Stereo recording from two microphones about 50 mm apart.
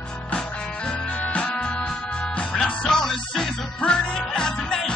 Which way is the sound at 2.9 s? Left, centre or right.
Centre.